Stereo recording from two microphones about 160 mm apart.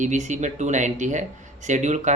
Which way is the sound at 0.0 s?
50° right (ahead or behind).